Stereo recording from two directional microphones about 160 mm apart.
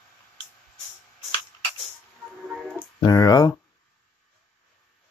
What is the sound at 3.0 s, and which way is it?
Speech, 25° left (ahead or behind).